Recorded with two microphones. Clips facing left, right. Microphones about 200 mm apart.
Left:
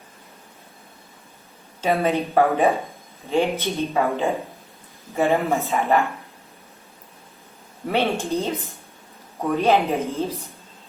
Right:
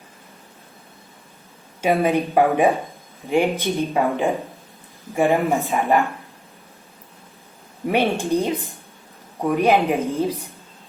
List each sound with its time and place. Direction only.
1.8 s speech: 15° right (ahead or behind)
7.9 s speech: 15° right (ahead or behind)